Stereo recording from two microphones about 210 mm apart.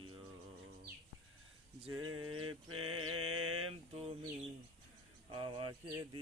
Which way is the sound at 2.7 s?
90° right.